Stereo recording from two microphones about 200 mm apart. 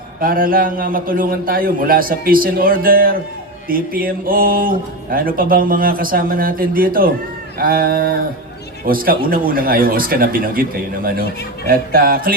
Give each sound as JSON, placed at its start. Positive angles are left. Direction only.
{"t": 0.2, "sound": "a man's voice", "side_deg": -45}